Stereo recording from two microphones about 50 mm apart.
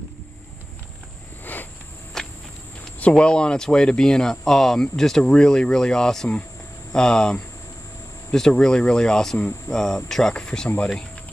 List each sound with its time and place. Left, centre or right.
1.4 s cricket: left
2.2 s walk: centre
3.2 s speech: centre